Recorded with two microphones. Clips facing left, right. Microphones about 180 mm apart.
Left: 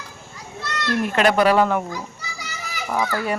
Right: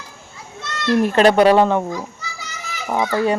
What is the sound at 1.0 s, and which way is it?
Speech, 30° right (ahead or behind).